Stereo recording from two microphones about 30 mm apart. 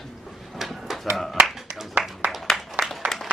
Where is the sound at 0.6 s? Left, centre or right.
Centre.